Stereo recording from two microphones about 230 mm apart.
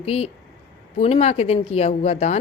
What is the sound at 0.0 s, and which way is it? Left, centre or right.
A woman's voice, left.